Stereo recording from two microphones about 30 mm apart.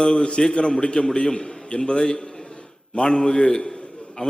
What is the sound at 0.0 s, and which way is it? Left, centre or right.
A man's voice, left.